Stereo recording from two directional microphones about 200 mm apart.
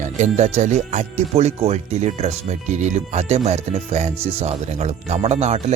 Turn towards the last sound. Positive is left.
turn(degrees=-35)  # may be behind; listen again after turning